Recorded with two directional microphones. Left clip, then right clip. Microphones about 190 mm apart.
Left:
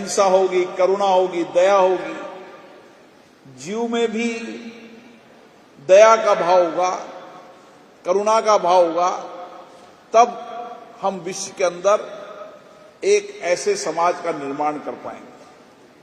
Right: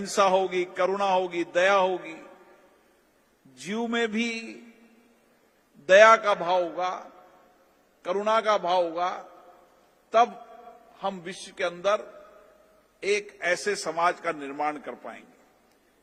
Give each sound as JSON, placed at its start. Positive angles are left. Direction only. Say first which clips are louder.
{"t": 0.2, "sound": "a man's voice", "louder": "left 7 dB", "side_deg": -35}
{"t": 3.7, "sound": "a man's voice", "louder": "left 7 dB", "side_deg": -30}
{"t": 5.8, "sound": "a man's voice", "louder": "left 5 dB", "side_deg": -30}
{"t": 8.0, "sound": "a man's voice", "louder": "left 7 dB", "side_deg": -30}
{"t": 11.0, "sound": "a man's voice", "louder": "left 9 dB", "side_deg": -25}
{"t": 13.0, "sound": "a man's voice", "louder": "left 9 dB", "side_deg": -25}